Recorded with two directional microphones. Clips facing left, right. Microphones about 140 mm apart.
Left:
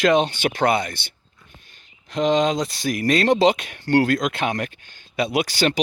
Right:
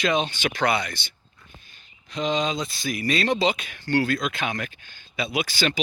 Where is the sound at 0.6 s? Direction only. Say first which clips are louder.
Left 3 dB; 50° left (ahead or behind).